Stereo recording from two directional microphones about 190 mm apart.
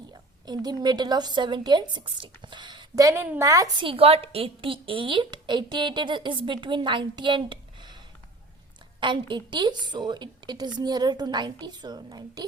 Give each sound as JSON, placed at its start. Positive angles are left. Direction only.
{"t": 0.1, "sound": "a woman's voice", "side_deg": -20}
{"t": 9.0, "sound": "a woman's voice", "side_deg": -25}